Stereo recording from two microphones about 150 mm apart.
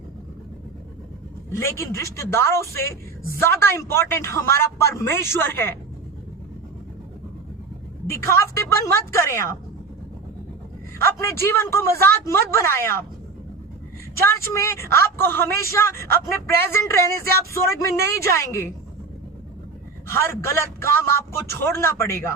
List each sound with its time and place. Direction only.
1.5 s a man's voice: 15° left (ahead or behind)
8.0 s a man's voice: 15° left (ahead or behind)
10.9 s a man's voice: 15° left (ahead or behind)
14.2 s a man's voice: 20° left (ahead or behind)
20.1 s a man's voice: 15° left (ahead or behind)